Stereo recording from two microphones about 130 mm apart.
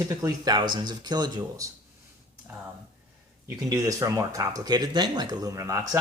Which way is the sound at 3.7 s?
25° right (ahead or behind).